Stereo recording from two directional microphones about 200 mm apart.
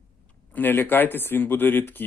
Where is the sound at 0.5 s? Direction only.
10° left (ahead or behind).